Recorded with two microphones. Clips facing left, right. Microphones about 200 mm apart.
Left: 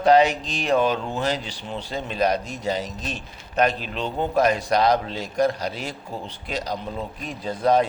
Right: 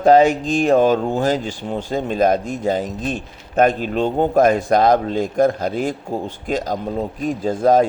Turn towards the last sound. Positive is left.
turn(degrees=-45)  # may be behind; listen again after turning